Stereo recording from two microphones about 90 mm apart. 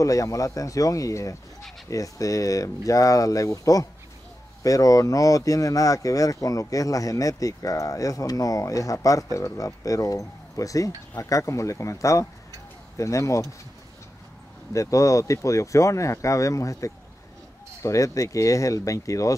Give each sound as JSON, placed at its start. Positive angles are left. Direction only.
{"t": 0.0, "sound": "speech", "side_deg": 40}
{"t": 14.7, "sound": "speech", "side_deg": 35}